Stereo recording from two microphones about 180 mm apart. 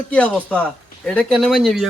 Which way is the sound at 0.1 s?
5° left (ahead or behind).